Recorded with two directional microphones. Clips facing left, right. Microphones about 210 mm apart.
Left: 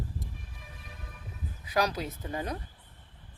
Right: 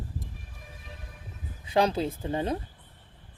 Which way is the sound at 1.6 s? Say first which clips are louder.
Right 5 dB; 25° right (ahead or behind).